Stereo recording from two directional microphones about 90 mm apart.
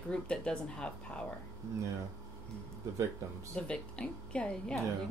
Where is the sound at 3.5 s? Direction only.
10° left (ahead or behind).